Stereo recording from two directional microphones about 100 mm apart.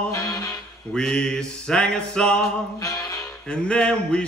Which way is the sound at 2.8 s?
35° left (ahead or behind).